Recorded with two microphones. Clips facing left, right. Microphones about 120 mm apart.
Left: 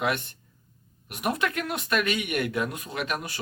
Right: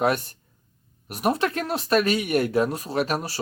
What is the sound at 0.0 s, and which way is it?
Speech, 40° right (ahead or behind).